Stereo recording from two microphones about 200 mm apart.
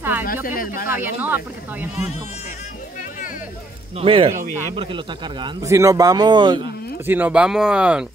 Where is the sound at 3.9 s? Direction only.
30° right (ahead or behind).